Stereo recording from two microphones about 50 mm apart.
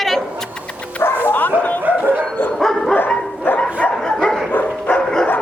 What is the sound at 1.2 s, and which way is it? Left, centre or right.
Bow-wow, left.